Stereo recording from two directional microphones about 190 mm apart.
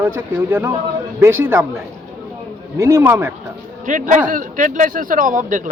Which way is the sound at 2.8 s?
15° right (ahead or behind).